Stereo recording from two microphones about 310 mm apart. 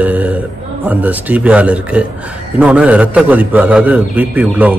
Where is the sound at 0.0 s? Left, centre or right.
Centre.